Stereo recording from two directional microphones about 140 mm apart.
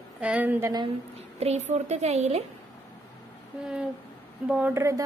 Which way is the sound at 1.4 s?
50° right (ahead or behind).